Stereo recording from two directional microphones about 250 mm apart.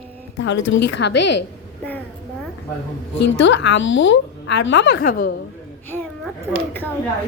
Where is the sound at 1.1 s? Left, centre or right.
Left.